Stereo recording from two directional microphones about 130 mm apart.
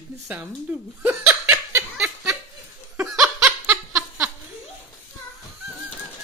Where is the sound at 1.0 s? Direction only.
15° right (ahead or behind).